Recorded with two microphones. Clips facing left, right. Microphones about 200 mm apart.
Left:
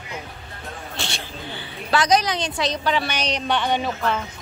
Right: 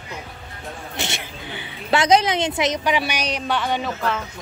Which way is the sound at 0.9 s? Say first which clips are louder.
Right 3 dB; 20° right (ahead or behind).